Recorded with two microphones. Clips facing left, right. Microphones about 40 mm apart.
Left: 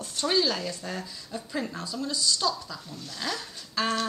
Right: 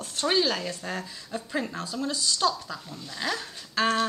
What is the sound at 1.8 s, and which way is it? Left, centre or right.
Speech, right.